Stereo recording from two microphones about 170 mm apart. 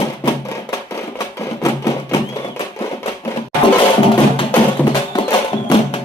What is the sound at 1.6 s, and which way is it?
Music, 20° left (ahead or behind).